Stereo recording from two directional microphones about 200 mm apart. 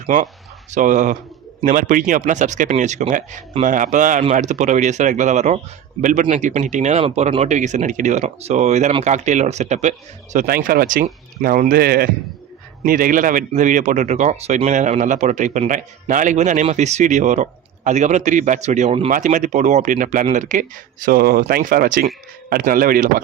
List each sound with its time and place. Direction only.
0.0 s speech: 40° right (ahead or behind)